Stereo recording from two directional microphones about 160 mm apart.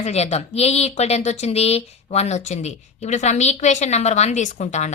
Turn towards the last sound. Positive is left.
turn(degrees=45)  # may be behind; listen again after turning